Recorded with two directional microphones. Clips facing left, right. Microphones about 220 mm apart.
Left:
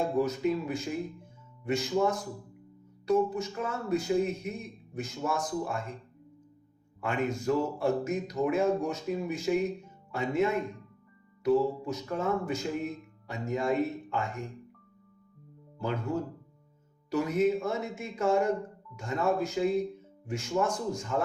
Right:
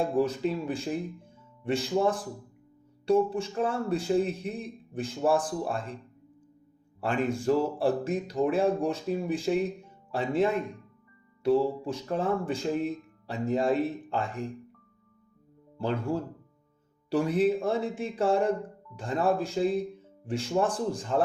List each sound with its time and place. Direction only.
0.0 s speech: 30° right (ahead or behind)
7.0 s speech: 30° right (ahead or behind)
15.8 s speech: 30° right (ahead or behind)